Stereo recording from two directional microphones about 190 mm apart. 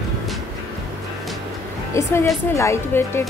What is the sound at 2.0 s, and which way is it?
A woman's voice, 15° left (ahead or behind).